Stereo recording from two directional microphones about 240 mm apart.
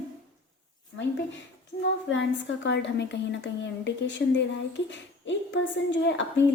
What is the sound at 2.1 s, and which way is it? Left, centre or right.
A woman's voice, left.